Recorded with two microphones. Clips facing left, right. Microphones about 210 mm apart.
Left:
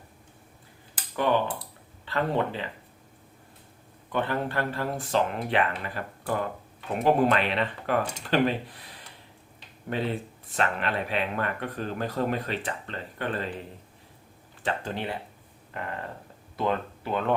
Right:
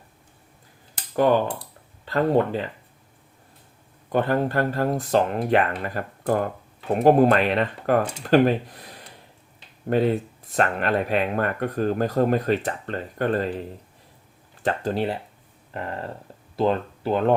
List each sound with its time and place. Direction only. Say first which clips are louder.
0.9 s a sound: right 6 dB; 45° right (ahead or behind)
2.0 s speech: right 7 dB; 40° right (ahead or behind)
4.1 s speech: right 6 dB; 40° right (ahead or behind)
14.6 s speech: right 7 dB; 40° right (ahead or behind)
16.6 s speech: right 6 dB; 35° right (ahead or behind)